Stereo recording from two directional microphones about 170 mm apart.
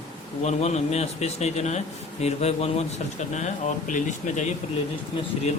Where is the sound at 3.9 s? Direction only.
45° left (ahead or behind).